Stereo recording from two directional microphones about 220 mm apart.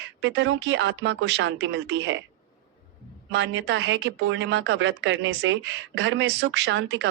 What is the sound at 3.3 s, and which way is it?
Speech, 55° right (ahead or behind).